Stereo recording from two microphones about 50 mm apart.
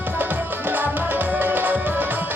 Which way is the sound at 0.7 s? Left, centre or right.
Right.